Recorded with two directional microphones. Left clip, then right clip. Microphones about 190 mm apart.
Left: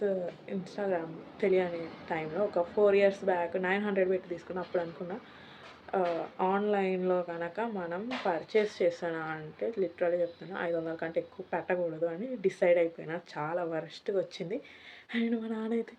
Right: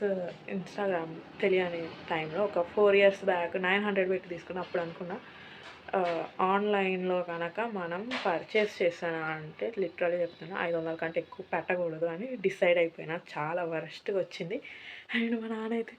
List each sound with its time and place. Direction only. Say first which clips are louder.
0.0 s a woman's voice: even; 5° left (ahead or behind)